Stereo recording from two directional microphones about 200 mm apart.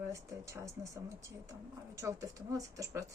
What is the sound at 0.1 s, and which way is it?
Speech, 15° right (ahead or behind).